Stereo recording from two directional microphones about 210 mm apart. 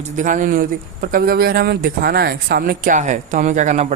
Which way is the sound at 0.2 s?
35° right (ahead or behind).